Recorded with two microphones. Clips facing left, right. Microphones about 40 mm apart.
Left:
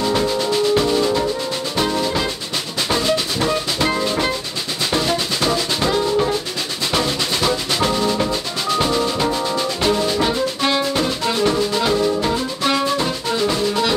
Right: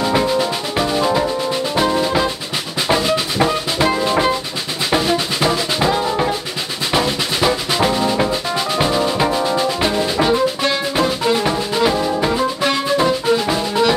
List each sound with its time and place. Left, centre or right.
0.0 s music: right
2.9 s drum: centre
6.9 s music: centre